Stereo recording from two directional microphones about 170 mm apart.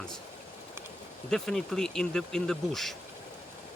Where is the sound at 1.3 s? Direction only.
Centre (ahead or behind).